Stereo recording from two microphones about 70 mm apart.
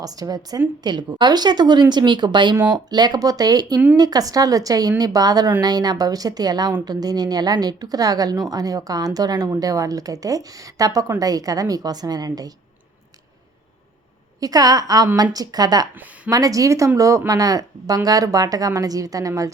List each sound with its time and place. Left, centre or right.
0.0 s a woman's voice: right
0.9 s a woman's voice: right
14.4 s a woman's voice: right
16.3 s a woman's voice: right